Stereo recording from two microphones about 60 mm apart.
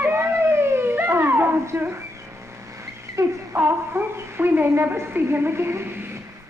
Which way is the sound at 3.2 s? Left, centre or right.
Right.